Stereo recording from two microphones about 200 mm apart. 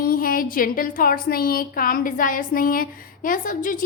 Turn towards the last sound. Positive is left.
turn(degrees=40)  # may be behind; listen again after turning